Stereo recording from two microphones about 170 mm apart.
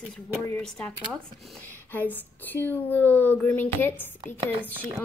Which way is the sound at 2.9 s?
10° left (ahead or behind).